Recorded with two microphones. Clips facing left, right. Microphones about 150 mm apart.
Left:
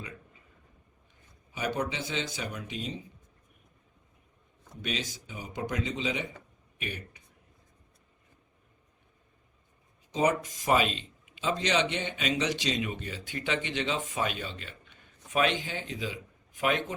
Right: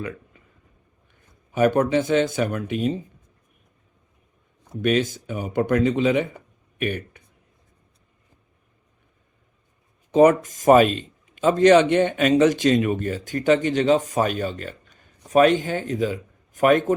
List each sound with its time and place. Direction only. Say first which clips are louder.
1.5 s speech: right 14 dB; 50° right (ahead or behind)
4.7 s speech: right 15 dB; 55° right (ahead or behind)
10.1 s speech: right 12 dB; 55° right (ahead or behind)